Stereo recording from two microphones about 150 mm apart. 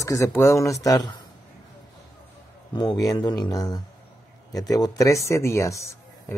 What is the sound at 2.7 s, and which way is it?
Speech, 30° left (ahead or behind).